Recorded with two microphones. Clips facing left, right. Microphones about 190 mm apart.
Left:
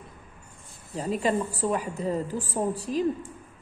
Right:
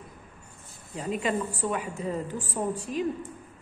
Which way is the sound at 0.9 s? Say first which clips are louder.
Left 3 dB; 35° left (ahead or behind).